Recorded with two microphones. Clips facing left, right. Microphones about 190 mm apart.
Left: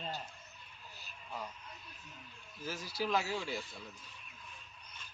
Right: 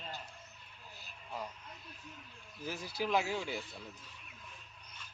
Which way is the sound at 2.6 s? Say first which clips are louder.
Even; 15° right (ahead or behind).